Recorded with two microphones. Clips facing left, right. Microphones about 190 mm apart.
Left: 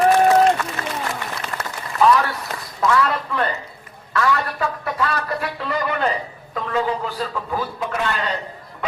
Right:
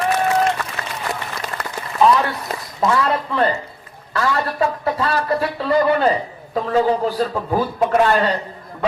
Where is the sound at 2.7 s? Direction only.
25° right (ahead or behind).